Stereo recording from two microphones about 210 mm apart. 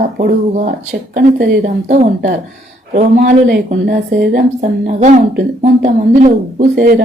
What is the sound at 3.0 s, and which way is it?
Speech, 35° right (ahead or behind).